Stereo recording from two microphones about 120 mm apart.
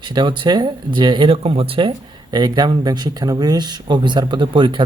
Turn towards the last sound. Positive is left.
turn(degrees=-45)  # may be behind; listen again after turning